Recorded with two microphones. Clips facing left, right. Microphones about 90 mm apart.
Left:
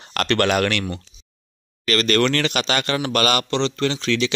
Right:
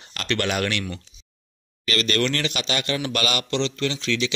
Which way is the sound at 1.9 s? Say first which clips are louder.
Left 5 dB; 45° left (ahead or behind).